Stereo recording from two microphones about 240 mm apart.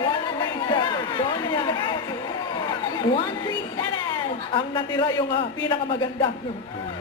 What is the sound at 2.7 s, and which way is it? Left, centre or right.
Chatter, centre.